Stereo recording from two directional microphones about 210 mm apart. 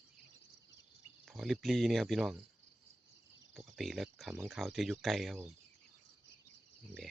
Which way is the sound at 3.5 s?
Centre (ahead or behind).